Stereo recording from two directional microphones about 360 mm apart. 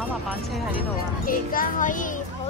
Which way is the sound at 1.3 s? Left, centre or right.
Left.